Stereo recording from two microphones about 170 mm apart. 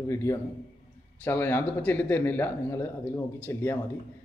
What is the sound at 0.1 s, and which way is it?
Speech, 15° left (ahead or behind).